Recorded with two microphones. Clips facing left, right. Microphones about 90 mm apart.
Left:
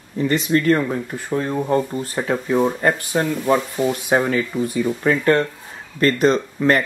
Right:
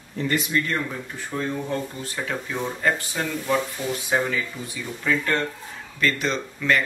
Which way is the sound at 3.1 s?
50° left (ahead or behind).